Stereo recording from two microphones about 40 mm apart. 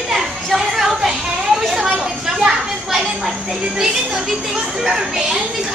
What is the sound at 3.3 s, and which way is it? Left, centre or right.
Speech, centre.